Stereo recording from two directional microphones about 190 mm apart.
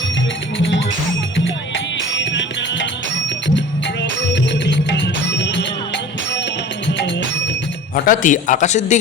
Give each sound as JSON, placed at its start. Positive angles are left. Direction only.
{"t": 1.5, "sound": "music", "side_deg": 75}
{"t": 4.6, "sound": "music", "side_deg": 65}
{"t": 6.8, "sound": "music", "side_deg": 70}
{"t": 7.9, "sound": "a man's voice", "side_deg": 45}